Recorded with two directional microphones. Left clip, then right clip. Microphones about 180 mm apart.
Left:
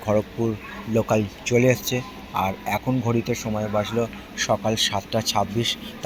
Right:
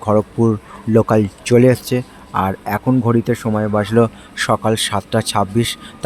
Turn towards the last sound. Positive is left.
turn(degrees=-40)  # may be behind; listen again after turning